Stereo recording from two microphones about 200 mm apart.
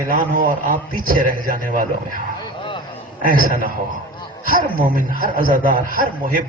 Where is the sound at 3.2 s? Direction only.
45° right (ahead or behind).